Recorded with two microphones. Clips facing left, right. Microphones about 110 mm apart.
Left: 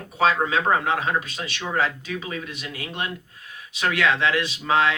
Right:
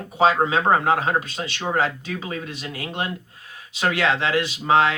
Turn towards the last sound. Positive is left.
turn(degrees=-30)  # may be behind; listen again after turning